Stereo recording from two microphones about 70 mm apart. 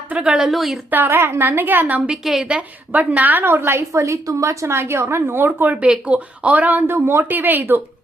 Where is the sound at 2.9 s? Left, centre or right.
Right.